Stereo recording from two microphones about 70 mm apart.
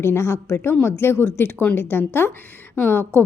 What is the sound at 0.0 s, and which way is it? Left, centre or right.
A woman's voice, left.